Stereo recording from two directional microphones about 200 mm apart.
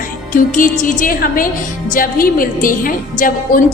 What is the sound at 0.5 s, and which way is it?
A woman's voice, 40° left (ahead or behind).